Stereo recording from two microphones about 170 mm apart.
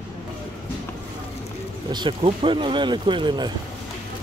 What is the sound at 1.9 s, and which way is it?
Speech, 25° right (ahead or behind).